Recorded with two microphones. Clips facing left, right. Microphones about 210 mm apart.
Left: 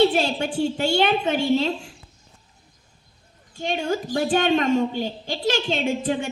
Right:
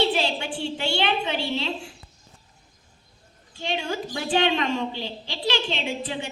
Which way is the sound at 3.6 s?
45° left (ahead or behind).